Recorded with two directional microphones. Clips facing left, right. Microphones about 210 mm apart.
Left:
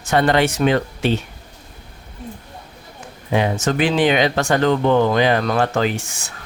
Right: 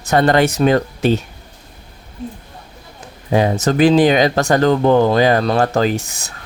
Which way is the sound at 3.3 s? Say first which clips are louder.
Right 4 dB; 40° right (ahead or behind).